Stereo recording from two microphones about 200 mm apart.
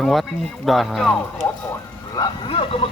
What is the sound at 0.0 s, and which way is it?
Speech, centre (ahead or behind).